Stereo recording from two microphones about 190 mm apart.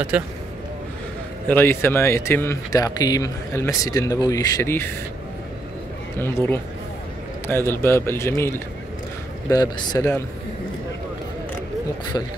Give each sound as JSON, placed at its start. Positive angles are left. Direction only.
{"t": 0.1, "sound": "speech", "side_deg": -5}
{"t": 1.5, "sound": "speech", "side_deg": 10}
{"t": 6.1, "sound": "speech", "side_deg": 10}